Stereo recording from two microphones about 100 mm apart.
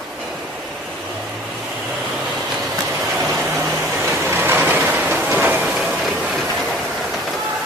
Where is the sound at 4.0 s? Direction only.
20° right (ahead or behind).